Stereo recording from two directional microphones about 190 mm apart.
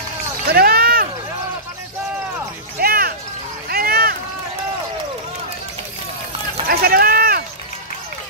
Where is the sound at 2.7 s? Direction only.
50° right (ahead or behind).